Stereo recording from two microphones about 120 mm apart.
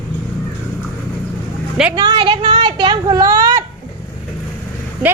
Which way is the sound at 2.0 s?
35° right (ahead or behind).